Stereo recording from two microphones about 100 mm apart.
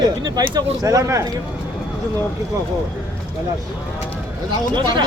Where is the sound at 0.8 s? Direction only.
35° right (ahead or behind).